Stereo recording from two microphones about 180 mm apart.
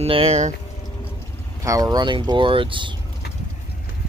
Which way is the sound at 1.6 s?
20° right (ahead or behind).